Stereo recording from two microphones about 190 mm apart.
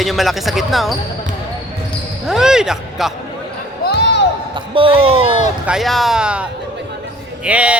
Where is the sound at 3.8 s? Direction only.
60° left (ahead or behind).